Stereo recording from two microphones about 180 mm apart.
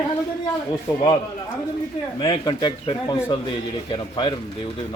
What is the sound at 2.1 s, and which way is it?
Speech, 30° left (ahead or behind).